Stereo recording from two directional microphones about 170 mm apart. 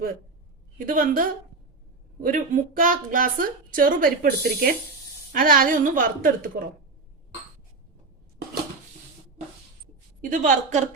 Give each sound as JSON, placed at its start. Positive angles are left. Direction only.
{"t": 0.9, "sound": "a woman's voice", "side_deg": -55}
{"t": 10.2, "sound": "a woman's voice", "side_deg": -50}